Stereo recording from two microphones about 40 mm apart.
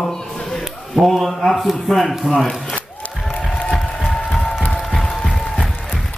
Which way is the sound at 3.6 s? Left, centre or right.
Centre.